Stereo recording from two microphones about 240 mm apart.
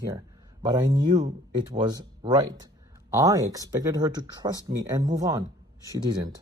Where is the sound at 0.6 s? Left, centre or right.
Centre.